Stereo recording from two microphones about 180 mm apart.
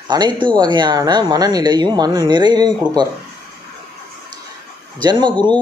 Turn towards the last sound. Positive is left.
turn(degrees=-25)  # may be behind; listen again after turning